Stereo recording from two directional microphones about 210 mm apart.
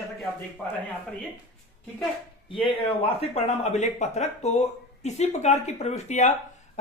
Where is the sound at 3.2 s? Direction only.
30° left (ahead or behind).